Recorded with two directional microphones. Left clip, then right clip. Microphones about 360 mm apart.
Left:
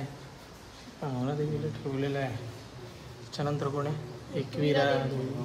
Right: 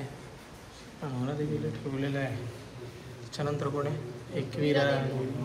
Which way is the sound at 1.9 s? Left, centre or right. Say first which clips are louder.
Left 2 dB; centre.